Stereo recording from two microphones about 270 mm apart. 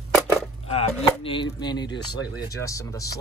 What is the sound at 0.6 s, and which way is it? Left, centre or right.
Speech, left.